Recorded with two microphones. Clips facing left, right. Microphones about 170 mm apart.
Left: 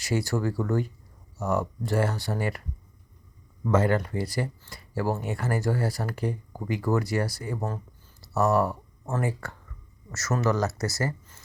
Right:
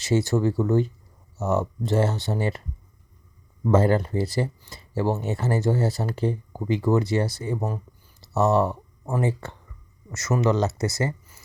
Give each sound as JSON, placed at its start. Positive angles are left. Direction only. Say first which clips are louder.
{"t": 0.0, "sound": "speech", "louder": "right 5 dB", "side_deg": -25}